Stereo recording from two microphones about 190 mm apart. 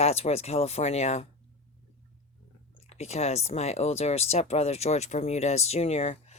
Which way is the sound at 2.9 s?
35° left (ahead or behind).